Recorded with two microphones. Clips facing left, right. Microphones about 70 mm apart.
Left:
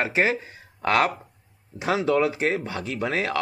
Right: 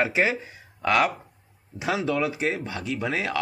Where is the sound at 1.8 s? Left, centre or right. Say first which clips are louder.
Left 3 dB; left.